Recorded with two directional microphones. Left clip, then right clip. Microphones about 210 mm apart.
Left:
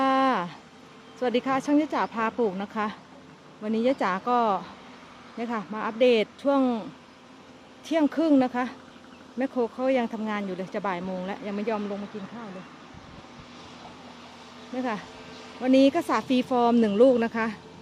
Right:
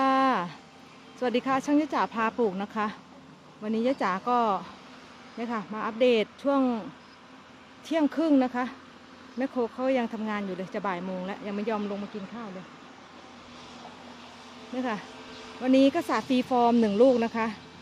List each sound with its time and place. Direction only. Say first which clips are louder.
0.0 s a sound: left 1 dB; centre (ahead or behind)
1.2 s speech: left 1 dB; 5° right (ahead or behind)
7.9 s speech: left 2 dB; centre (ahead or behind)
14.8 s speech: left 1 dB; centre (ahead or behind)
15.0 s a sound: even; 30° right (ahead or behind)
15.6 s speech: left 2 dB; centre (ahead or behind)